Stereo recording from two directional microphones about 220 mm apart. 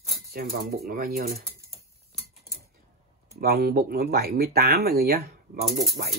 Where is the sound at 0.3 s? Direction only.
45° right (ahead or behind).